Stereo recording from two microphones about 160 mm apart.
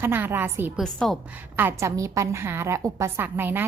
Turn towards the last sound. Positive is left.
turn(degrees=-15)  # may be behind; listen again after turning